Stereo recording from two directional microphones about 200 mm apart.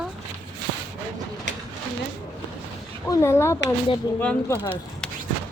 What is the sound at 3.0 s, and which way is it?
Speech, 15° left (ahead or behind).